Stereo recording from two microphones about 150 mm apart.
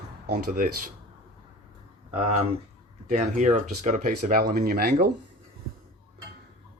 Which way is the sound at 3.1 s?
55° right (ahead or behind).